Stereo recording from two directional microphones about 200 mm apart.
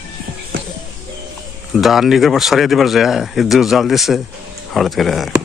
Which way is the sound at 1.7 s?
Centre (ahead or behind).